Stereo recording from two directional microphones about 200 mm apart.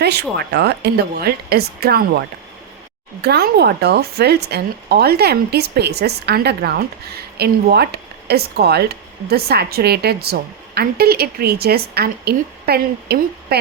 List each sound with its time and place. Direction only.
0.0 s speech: 55° right (ahead or behind)